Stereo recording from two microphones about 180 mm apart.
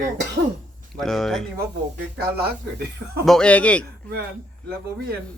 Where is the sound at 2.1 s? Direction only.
60° right (ahead or behind).